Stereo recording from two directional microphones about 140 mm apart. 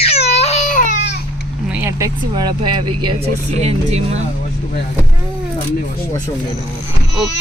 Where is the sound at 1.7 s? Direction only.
15° right (ahead or behind).